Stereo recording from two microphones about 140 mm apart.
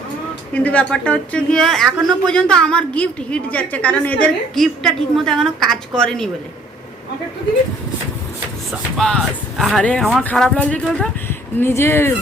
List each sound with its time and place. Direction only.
0.5 s speech: 10° left (ahead or behind)
9.0 s speech: 5° left (ahead or behind)